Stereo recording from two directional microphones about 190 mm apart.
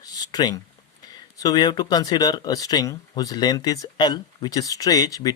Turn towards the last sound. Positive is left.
turn(degrees=20)  # may be behind; listen again after turning